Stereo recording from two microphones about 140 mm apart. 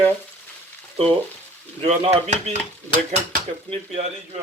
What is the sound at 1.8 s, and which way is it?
Speech, 50° right (ahead or behind).